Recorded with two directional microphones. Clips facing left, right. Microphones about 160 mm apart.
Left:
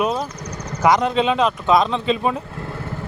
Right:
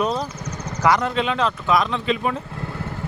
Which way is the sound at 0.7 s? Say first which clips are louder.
Left 3 dB; 20° left (ahead or behind).